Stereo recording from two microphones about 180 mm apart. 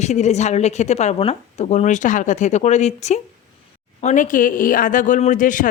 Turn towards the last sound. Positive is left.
turn(degrees=45)  # may be behind; listen again after turning